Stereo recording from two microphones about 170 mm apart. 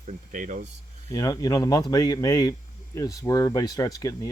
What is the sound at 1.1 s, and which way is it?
Speech, 20° left (ahead or behind).